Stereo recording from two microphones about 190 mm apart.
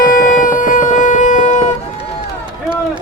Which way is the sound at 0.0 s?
45° left (ahead or behind).